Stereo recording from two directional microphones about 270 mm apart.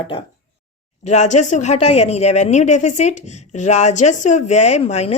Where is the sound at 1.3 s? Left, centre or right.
Left.